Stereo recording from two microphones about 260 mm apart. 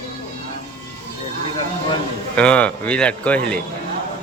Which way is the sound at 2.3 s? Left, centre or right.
Centre.